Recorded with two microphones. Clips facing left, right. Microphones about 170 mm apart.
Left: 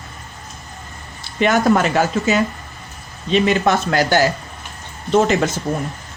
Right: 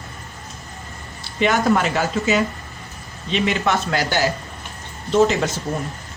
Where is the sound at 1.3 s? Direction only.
50° left (ahead or behind).